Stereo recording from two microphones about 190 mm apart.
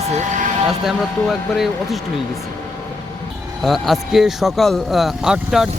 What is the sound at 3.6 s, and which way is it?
A man's voice, centre (ahead or behind).